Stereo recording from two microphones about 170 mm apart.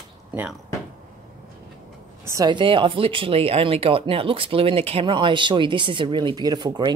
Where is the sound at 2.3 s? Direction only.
25° right (ahead or behind).